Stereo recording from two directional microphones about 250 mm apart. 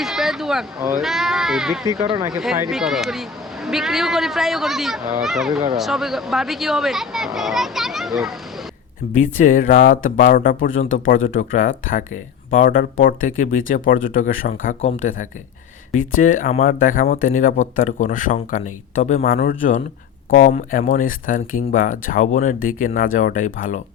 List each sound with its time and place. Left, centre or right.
0.0 s a sound: centre
1.0 s speech: centre
9.2 s speech: left